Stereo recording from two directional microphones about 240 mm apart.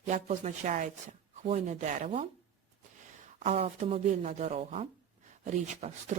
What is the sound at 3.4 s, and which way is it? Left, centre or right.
Speech, right.